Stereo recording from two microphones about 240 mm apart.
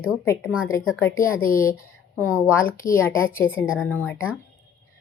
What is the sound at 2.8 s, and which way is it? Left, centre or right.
A woman's voice, centre.